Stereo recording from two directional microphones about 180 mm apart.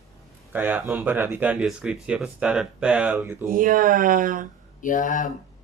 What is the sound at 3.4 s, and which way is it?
Speech, 50° right (ahead or behind).